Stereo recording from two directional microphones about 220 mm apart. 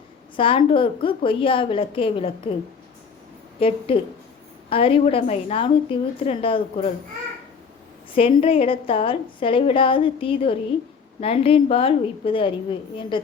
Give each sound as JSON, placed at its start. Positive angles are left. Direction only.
{"t": 0.3, "sound": "a woman's voice", "side_deg": 25}
{"t": 3.6, "sound": "a woman's voice", "side_deg": 25}
{"t": 8.1, "sound": "a woman's voice", "side_deg": 25}